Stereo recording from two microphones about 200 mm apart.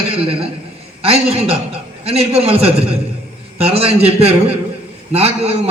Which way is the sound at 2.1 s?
30° right (ahead or behind).